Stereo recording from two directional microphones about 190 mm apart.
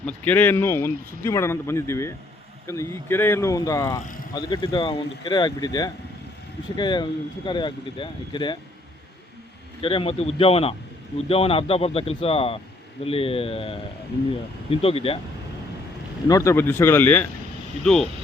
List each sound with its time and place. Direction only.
0.0 s speech: 10° left (ahead or behind); by 8.5 s 25° left (ahead or behind)
9.8 s speech: 30° left (ahead or behind)
16.3 s speech: 15° left (ahead or behind)